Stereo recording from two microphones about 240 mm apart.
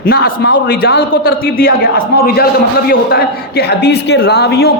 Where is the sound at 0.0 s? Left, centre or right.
Left.